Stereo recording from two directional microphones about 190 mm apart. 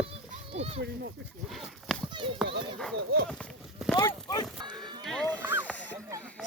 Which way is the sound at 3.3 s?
5° left (ahead or behind).